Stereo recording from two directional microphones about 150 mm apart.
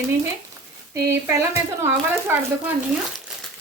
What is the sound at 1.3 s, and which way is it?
Speech, 20° right (ahead or behind).